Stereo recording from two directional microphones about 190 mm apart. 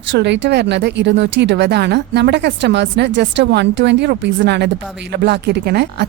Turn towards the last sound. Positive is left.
turn(degrees=-60)  # may be behind; listen again after turning